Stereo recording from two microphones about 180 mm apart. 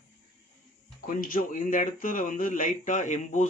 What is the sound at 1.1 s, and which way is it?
Speech, 50° left (ahead or behind).